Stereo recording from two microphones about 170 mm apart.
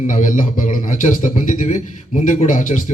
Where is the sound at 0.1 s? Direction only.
50° left (ahead or behind).